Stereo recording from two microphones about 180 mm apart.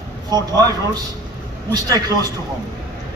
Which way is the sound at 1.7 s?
20° right (ahead or behind).